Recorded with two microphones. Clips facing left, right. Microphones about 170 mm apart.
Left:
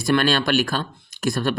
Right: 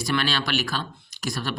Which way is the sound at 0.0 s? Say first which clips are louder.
Left 6 dB; 50° left (ahead or behind).